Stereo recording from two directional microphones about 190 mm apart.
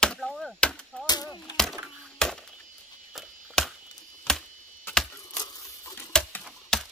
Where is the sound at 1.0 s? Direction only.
20° left (ahead or behind).